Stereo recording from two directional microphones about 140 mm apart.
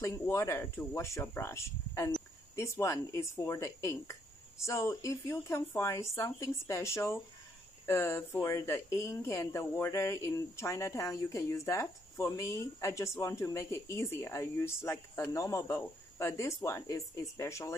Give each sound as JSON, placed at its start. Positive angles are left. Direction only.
{"t": 0.0, "sound": "speech", "side_deg": 20}